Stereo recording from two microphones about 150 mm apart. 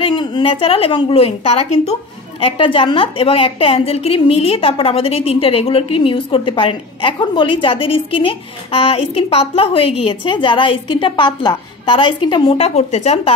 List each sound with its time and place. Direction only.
0.0 s a woman's voice: 30° left (ahead or behind); by 13.3 s 45° left (ahead or behind)